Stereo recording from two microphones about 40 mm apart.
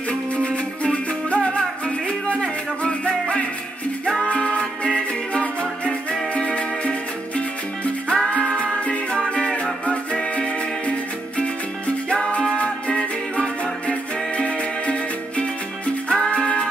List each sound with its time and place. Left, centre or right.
0.1 s music: left